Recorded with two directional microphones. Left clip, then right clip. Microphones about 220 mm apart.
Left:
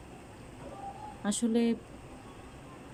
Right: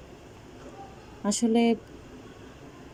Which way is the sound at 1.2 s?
5° right (ahead or behind).